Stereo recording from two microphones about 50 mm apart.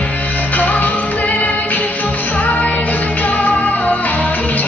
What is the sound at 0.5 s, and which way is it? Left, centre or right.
Music, left.